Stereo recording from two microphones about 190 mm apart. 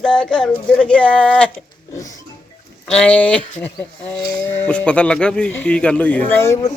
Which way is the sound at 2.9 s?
5° left (ahead or behind).